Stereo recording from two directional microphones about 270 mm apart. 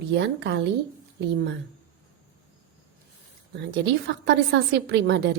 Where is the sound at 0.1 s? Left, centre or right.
Right.